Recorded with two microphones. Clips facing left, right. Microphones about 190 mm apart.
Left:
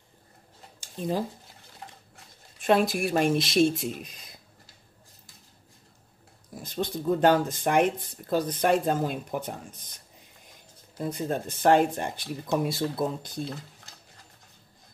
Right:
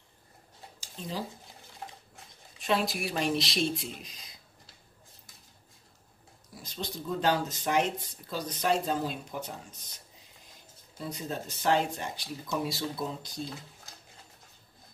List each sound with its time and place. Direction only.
0.7 s a sound: 55° left (ahead or behind)
2.6 s speech: 50° left (ahead or behind)
6.5 s speech: 55° left (ahead or behind)
11.0 s speech: 50° left (ahead or behind)